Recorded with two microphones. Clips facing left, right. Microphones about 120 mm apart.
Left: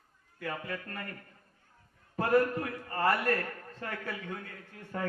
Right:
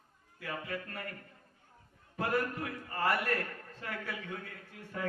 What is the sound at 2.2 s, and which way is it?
A man's voice, 40° left (ahead or behind).